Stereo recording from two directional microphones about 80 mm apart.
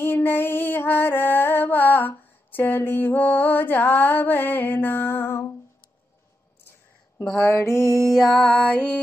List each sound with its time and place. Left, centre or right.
0.0 s music: left
7.3 s mantra: left
8.1 s music: centre